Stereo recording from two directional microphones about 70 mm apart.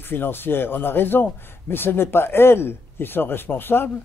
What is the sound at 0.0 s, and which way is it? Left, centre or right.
Speech, left.